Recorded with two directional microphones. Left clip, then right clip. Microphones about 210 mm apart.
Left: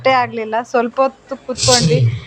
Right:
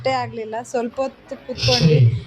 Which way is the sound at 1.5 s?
45° left (ahead or behind).